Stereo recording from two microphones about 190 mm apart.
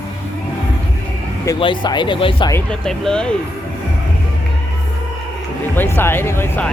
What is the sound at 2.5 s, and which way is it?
Speech, 5° left (ahead or behind).